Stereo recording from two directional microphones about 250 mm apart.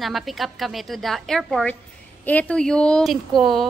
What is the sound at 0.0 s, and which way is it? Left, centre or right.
A woman's voice, centre.